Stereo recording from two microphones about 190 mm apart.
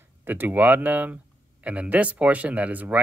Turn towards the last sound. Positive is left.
turn(degrees=-10)  # may be behind; listen again after turning